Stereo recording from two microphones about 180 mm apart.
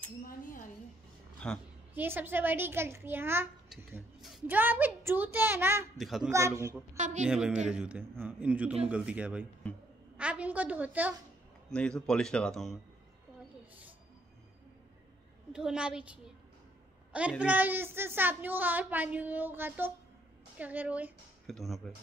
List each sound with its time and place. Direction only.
1.4 s a woman's voice: 5° left (ahead or behind)
2.0 s a woman's voice: 10° right (ahead or behind)
3.7 s a woman's voice: centre (ahead or behind)
5.9 s speech: centre (ahead or behind)
6.6 s a woman's voice: 15° right (ahead or behind)
7.2 s a woman's voice: 5° right (ahead or behind)
11.7 s speech: 5° left (ahead or behind)
15.5 s speech: 5° right (ahead or behind)
17.1 s a woman's voice: 5° right (ahead or behind)